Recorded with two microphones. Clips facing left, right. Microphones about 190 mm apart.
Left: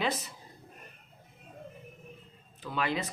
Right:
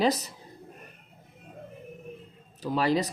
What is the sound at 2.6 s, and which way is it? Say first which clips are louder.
Speech: right 7 dB; 40° right (ahead or behind).